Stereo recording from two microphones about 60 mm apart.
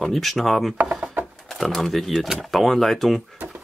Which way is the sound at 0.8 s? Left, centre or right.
Right.